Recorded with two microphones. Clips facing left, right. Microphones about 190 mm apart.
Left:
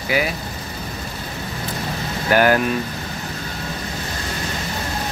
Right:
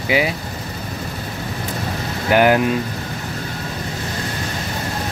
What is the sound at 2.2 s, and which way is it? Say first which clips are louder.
Speech: right 2 dB; 15° right (ahead or behind).